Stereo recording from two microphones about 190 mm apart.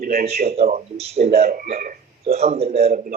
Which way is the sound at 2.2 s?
35° right (ahead or behind).